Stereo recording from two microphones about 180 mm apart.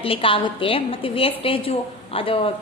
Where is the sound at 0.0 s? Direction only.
30° left (ahead or behind).